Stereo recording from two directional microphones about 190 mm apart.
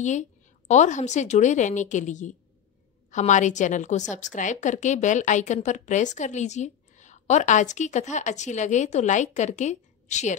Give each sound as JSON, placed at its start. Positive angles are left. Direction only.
{"t": 0.0, "sound": "a woman's voice", "side_deg": 40}